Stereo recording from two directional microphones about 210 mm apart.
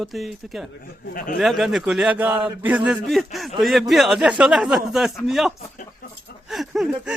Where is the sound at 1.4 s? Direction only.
Centre (ahead or behind).